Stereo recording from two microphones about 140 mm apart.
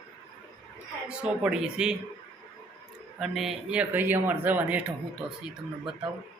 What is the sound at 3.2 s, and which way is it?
Speech, centre (ahead or behind).